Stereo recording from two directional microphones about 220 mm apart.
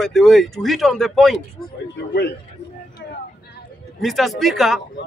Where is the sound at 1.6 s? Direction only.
45° left (ahead or behind).